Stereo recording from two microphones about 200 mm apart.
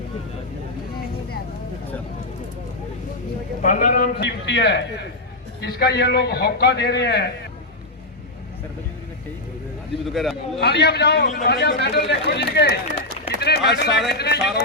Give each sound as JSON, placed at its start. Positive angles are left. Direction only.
{"t": 3.6, "sound": "a man's voice", "side_deg": 40}
{"t": 4.2, "sound": "a man's voice", "side_deg": 60}
{"t": 10.1, "sound": "a man's voice", "side_deg": 0}
{"t": 10.6, "sound": "a man's voice", "side_deg": 55}